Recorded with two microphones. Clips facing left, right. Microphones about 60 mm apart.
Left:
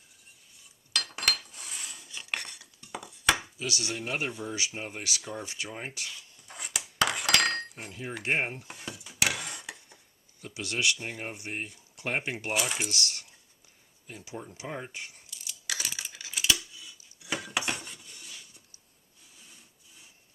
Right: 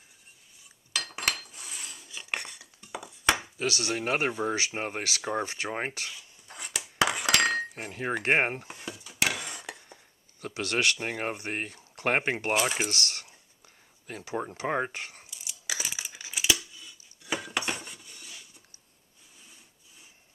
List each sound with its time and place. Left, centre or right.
0.9 s dishes: centre
3.6 s speech: right
6.1 s dishes: centre
7.8 s speech: right
8.7 s cutlery: centre
10.4 s speech: right
11.0 s speech: right
14.1 s speech: right
15.3 s tearing: centre
16.7 s cutlery: centre